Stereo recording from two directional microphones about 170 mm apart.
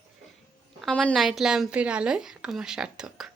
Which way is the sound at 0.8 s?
5° left (ahead or behind).